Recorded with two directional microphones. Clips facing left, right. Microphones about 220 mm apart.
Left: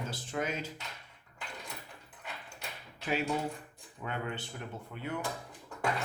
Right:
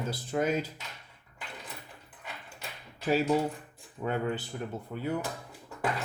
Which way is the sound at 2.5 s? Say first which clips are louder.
Right 1 dB; centre (ahead or behind).